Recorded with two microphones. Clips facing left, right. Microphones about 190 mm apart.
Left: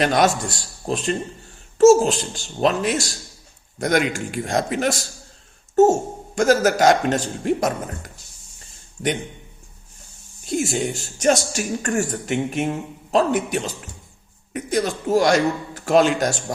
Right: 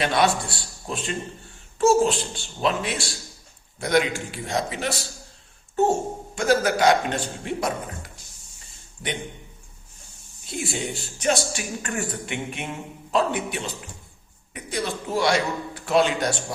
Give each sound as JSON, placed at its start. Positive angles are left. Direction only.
{"t": 0.0, "sound": "speech", "side_deg": 45}
{"t": 10.5, "sound": "speech", "side_deg": 45}